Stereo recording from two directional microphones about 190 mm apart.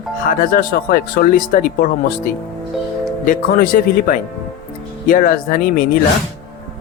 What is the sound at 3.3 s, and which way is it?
Speech, 50° left (ahead or behind).